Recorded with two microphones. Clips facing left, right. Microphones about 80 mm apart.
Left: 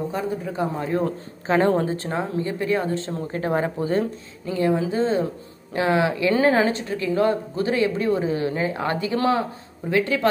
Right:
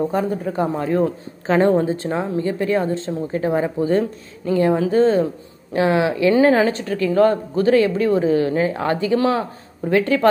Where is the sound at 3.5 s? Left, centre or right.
Left.